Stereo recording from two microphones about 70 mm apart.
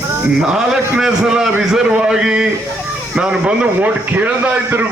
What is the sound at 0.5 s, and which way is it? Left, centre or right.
A man's voice, centre.